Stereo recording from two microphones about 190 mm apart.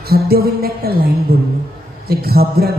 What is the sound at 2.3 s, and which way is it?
Speech, 55° right (ahead or behind).